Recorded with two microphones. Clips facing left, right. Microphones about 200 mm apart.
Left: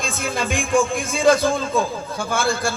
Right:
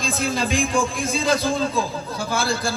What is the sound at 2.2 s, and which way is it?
Speech, 55° left (ahead or behind).